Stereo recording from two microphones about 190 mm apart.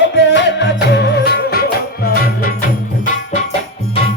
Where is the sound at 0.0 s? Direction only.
70° left (ahead or behind); by 2.6 s 50° left (ahead or behind).